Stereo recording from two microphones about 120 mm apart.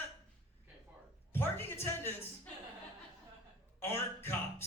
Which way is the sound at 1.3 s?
20° left (ahead or behind).